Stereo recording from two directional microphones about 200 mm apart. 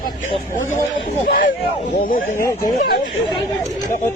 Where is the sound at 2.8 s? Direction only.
50° left (ahead or behind).